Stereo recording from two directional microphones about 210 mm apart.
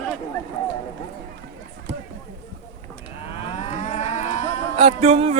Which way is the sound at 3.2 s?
30° left (ahead or behind).